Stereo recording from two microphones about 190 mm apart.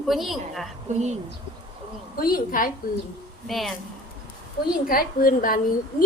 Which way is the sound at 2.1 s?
50° left (ahead or behind).